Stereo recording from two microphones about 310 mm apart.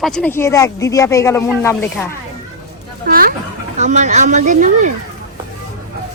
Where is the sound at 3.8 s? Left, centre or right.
Right.